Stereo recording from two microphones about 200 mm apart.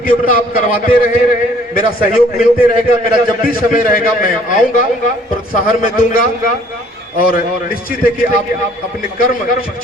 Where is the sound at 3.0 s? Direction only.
45° left (ahead or behind).